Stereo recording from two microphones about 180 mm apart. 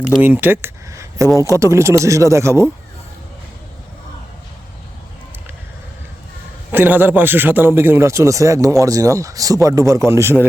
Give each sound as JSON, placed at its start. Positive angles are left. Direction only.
{"t": 0.2, "sound": "a man's voice", "side_deg": -10}
{"t": 6.7, "sound": "a man's voice", "side_deg": -10}